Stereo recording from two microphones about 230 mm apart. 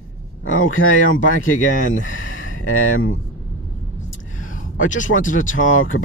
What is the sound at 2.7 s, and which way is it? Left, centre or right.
Speech, left.